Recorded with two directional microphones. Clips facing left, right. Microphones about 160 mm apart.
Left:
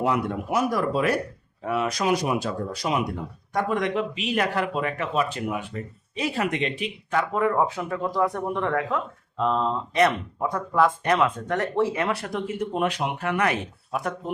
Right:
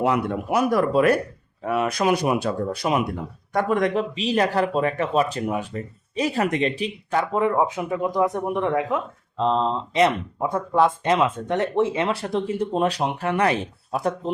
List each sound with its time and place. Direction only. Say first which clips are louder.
0.5 s speech: right 4 dB; 60° right (ahead or behind)
3.5 s speech: right 4 dB; 45° right (ahead or behind)
7.3 s speech: right 2 dB; 20° right (ahead or behind)